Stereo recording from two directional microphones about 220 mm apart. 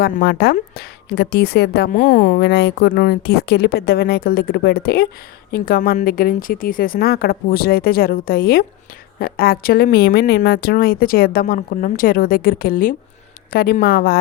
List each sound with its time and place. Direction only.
0.0 s a woman's voice: 50° left (ahead or behind)